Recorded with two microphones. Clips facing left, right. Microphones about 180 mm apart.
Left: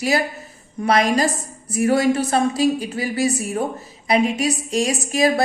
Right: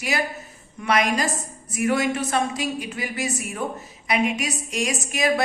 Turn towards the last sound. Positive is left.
turn(degrees=35)  # may be behind; listen again after turning